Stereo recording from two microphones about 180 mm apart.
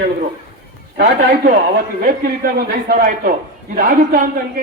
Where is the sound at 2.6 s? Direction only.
50° right (ahead or behind).